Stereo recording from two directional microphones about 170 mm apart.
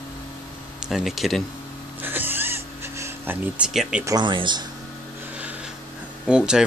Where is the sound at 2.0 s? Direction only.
10° right (ahead or behind).